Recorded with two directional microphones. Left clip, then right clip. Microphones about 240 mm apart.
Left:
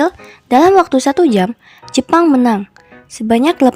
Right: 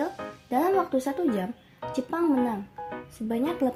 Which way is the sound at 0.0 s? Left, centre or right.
Left.